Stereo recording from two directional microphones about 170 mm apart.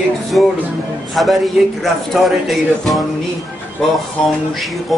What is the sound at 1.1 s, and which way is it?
A man's voice, centre (ahead or behind).